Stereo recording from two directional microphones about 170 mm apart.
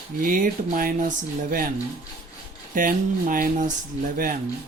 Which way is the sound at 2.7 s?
55° right (ahead or behind).